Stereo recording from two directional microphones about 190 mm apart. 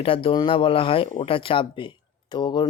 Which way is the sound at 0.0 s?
30° left (ahead or behind).